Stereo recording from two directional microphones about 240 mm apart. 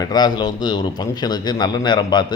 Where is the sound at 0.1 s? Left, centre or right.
Centre.